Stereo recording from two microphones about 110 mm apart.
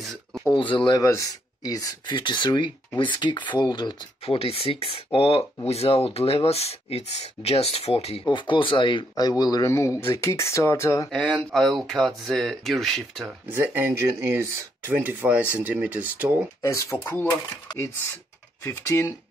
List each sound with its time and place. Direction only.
0.6 s speech: 45° left (ahead or behind)
1.0 s speech: 30° left (ahead or behind)
4.4 s speech: 60° left (ahead or behind)
8.4 s speech: 50° left (ahead or behind)
9.1 s speech: 35° left (ahead or behind)
11.3 s speech: centre (ahead or behind)
13.5 s speech: 20° right (ahead or behind)
14.9 s speech: 15° right (ahead or behind)
16.6 s speech: 25° left (ahead or behind)
18.6 s speech: 20° left (ahead or behind)